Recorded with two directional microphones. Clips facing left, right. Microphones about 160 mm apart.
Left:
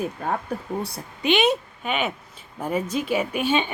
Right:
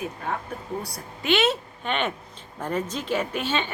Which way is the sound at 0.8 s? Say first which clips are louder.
Left 5 dB; 20° left (ahead or behind).